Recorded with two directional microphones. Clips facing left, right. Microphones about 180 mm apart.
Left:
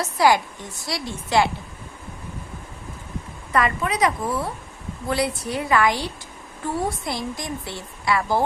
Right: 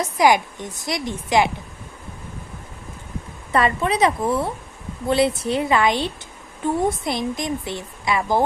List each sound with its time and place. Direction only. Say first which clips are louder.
0.0 s speech: right 2 dB; 15° right (ahead or behind)
3.5 s speech: right 3 dB; 30° right (ahead or behind)